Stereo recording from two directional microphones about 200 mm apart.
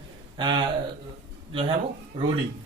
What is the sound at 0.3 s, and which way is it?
Speech, 20° right (ahead or behind).